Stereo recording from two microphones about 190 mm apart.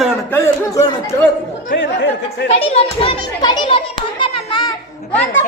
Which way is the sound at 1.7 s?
70° left (ahead or behind).